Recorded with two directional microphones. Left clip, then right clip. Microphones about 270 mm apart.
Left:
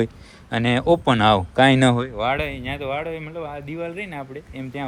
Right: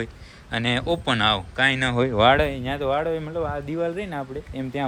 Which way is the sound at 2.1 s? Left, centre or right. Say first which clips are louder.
Right 5 dB; right.